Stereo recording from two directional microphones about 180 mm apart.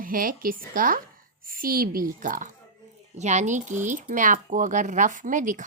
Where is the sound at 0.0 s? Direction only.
50° right (ahead or behind).